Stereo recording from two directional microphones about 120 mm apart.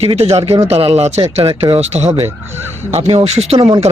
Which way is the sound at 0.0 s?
60° right (ahead or behind).